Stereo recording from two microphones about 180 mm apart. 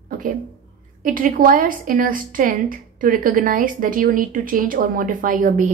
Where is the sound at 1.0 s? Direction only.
50° right (ahead or behind).